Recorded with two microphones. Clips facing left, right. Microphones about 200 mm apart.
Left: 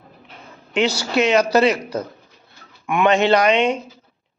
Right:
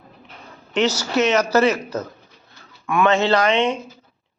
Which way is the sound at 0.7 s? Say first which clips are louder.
Even; 10° left (ahead or behind).